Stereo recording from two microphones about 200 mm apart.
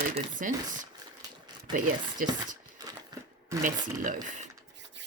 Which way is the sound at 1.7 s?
40° right (ahead or behind).